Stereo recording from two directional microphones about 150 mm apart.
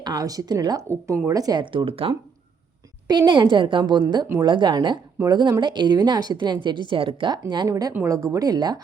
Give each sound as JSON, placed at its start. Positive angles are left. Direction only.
{"t": 0.0, "sound": "a woman's voice", "side_deg": -25}